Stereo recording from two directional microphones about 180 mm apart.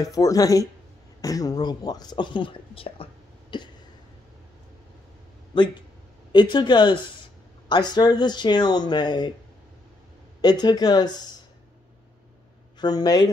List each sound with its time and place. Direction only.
0.0 s speech: 20° left (ahead or behind)
5.5 s speech: 25° left (ahead or behind)
10.4 s speech: 25° left (ahead or behind)
12.7 s speech: 25° left (ahead or behind)